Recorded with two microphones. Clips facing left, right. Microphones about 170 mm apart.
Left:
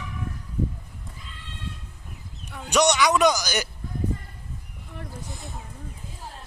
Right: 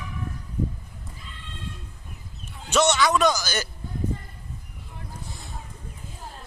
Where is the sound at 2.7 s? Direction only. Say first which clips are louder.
Left 1 dB; 15° left (ahead or behind).